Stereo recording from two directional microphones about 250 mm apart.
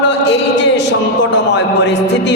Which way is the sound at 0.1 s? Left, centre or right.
Left.